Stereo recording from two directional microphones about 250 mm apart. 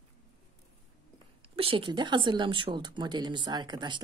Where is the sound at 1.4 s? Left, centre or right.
Right.